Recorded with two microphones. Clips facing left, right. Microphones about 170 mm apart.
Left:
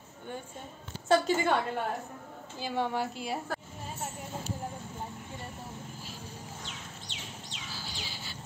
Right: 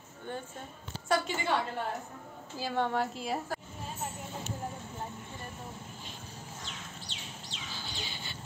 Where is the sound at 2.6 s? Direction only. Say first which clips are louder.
Right 1 dB; centre (ahead or behind).